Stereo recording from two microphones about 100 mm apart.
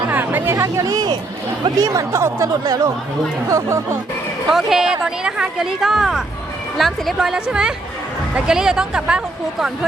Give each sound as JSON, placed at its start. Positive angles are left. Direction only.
{"t": 0.1, "sound": "a sound", "side_deg": -20}
{"t": 0.5, "sound": "speech", "side_deg": -35}
{"t": 3.5, "sound": "speech", "side_deg": -25}
{"t": 4.4, "sound": "speech", "side_deg": -5}